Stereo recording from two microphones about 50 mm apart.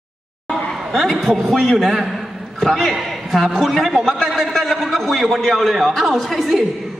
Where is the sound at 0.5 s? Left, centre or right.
Centre.